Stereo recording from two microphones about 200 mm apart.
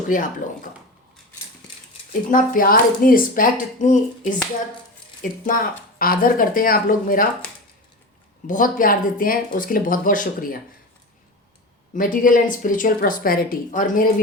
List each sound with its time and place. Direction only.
0.1 s speech: 40° left (ahead or behind)
2.3 s a woman's voice: 45° left (ahead or behind)
8.4 s a woman's voice: 40° left (ahead or behind)
11.9 s a woman's voice: 45° left (ahead or behind)